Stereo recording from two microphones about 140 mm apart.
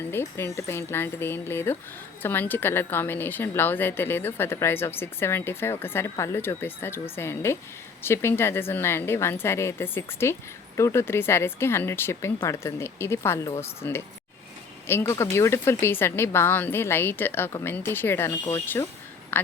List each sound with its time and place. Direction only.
0.1 s speech: 15° left (ahead or behind)